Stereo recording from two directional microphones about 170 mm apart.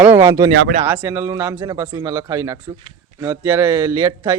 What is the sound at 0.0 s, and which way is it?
Speech, 15° right (ahead or behind).